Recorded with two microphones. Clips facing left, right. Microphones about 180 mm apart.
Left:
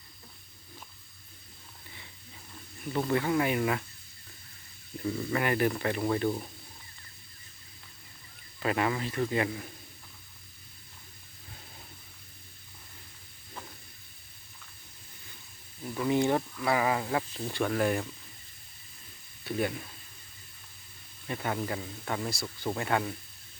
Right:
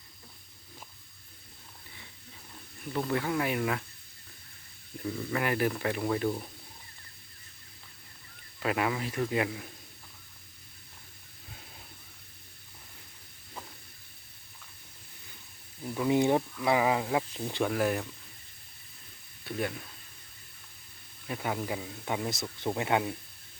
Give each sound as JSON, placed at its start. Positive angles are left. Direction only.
{"t": 2.9, "sound": "speech", "side_deg": 0}
{"t": 5.3, "sound": "speech", "side_deg": 0}
{"t": 8.6, "sound": "speech", "side_deg": -5}
{"t": 15.8, "sound": "snake", "side_deg": -15}
{"t": 16.6, "sound": "speech", "side_deg": -15}
{"t": 19.5, "sound": "speech", "side_deg": 0}
{"t": 21.2, "sound": "speech", "side_deg": -5}